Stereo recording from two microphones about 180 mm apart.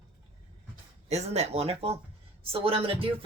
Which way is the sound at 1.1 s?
35° right (ahead or behind).